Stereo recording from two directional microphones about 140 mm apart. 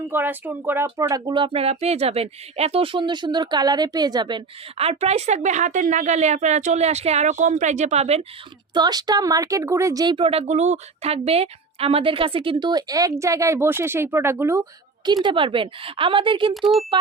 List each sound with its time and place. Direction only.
0.1 s speech: 15° right (ahead or behind); by 8.2 s 50° right (ahead or behind)
8.7 s speech: 30° right (ahead or behind)
16.6 s speech: centre (ahead or behind)